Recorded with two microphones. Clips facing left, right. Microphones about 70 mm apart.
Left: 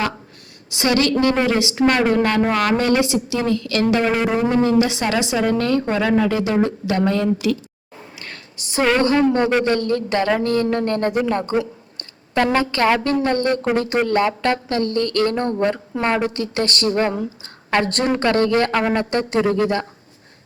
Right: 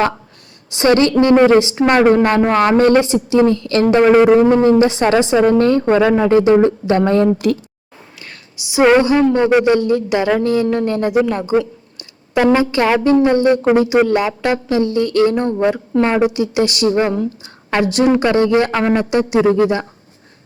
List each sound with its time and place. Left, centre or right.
0.8 s a woman's voice: right
7.3 s speech: right
8.8 s a woman's voice: centre
18.7 s a man's voice: centre